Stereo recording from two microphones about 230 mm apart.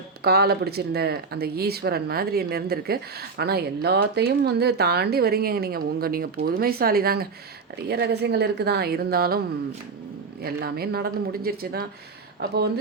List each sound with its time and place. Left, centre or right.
0.2 s speech: right
10.4 s speech: right